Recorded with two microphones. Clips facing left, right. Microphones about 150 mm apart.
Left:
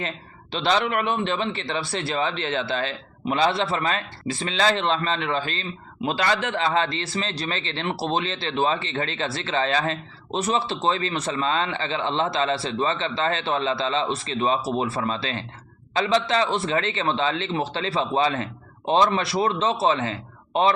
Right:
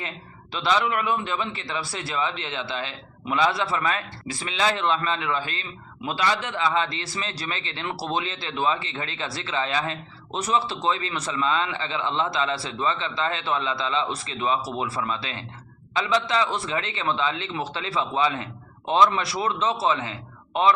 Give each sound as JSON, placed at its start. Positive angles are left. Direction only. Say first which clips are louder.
{"t": 0.5, "sound": "speech", "louder": "left 1 dB", "side_deg": 30}
{"t": 2.4, "sound": "speech", "louder": "left 5 dB", "side_deg": 45}
{"t": 3.2, "sound": "a man's voice", "louder": "left 2 dB", "side_deg": 25}
{"t": 6.0, "sound": "a man's voice", "louder": "left 1 dB", "side_deg": 60}
{"t": 6.9, "sound": "a man's voice", "louder": "left 4 dB", "side_deg": 25}